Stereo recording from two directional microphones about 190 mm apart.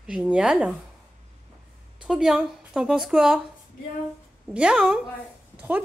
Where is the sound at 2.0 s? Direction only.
5° right (ahead or behind).